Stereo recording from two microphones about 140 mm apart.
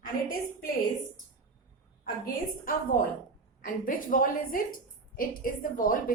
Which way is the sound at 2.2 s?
90° left.